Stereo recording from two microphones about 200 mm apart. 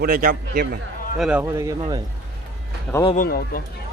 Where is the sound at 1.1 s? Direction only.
5° right (ahead or behind).